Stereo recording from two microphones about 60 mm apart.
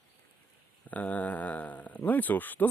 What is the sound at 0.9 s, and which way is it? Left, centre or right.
Speech, left.